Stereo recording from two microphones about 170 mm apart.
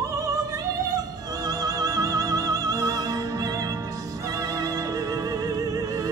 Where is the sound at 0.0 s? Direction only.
20° right (ahead or behind).